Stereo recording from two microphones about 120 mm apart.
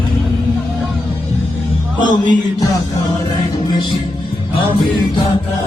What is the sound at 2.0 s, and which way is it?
Music, 40° left (ahead or behind).